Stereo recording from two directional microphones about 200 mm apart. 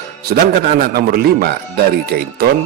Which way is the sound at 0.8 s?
50° right (ahead or behind).